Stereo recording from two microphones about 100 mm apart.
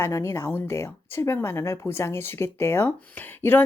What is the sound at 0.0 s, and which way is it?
Speech, 25° left (ahead or behind).